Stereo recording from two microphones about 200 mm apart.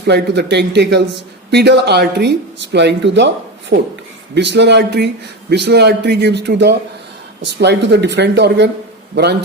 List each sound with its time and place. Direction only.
0.1 s a man's voice: 55° right (ahead or behind)